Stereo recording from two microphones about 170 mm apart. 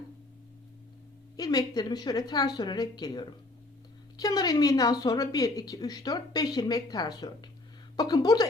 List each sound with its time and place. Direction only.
1.4 s a woman's voice: 25° left (ahead or behind)